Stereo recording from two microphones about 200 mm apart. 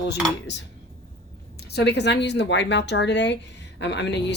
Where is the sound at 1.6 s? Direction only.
55° left (ahead or behind).